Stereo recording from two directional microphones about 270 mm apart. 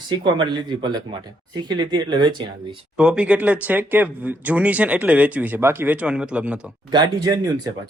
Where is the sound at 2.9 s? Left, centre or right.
Centre.